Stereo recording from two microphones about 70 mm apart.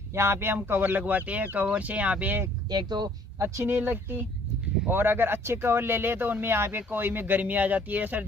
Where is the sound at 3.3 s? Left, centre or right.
Right.